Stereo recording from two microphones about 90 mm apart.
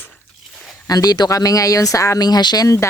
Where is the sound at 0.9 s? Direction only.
45° left (ahead or behind).